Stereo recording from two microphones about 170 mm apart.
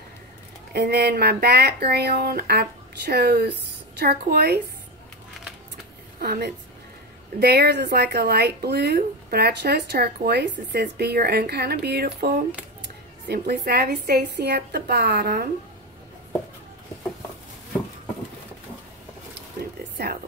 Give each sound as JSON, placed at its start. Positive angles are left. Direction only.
{"t": 0.7, "sound": "speech", "side_deg": -70}
{"t": 6.2, "sound": "speech", "side_deg": -65}
{"t": 19.6, "sound": "a sound", "side_deg": -65}